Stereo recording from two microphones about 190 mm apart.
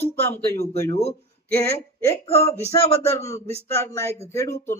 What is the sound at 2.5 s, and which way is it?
Speech, 30° left (ahead or behind).